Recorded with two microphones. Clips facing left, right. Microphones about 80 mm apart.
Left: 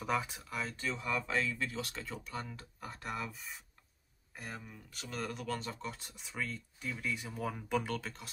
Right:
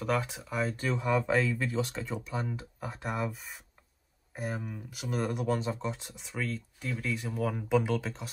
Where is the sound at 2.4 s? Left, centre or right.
Centre.